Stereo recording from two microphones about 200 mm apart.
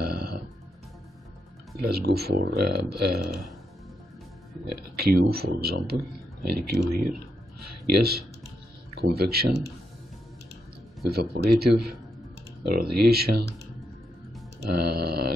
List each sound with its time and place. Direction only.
0.0 s burping: 50° right (ahead or behind)
1.8 s speech: 50° right (ahead or behind)
4.6 s speech: 50° right (ahead or behind)
11.1 s speech: 50° right (ahead or behind)
14.6 s speech: 55° right (ahead or behind)